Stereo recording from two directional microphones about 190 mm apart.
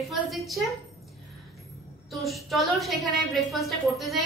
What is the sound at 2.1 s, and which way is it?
A woman's voice, centre (ahead or behind).